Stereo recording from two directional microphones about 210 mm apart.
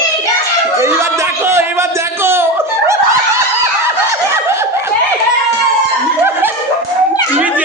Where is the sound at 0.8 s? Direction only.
15° right (ahead or behind).